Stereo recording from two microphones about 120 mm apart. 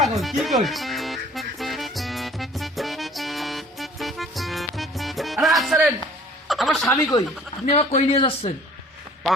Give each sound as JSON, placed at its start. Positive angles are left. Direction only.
{"t": 0.2, "sound": "music", "side_deg": 0}
{"t": 6.5, "sound": "a sound", "side_deg": 0}
{"t": 7.6, "sound": "a man's voice", "side_deg": 65}